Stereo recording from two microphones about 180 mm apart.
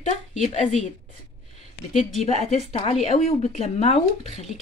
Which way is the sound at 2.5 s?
35° left (ahead or behind).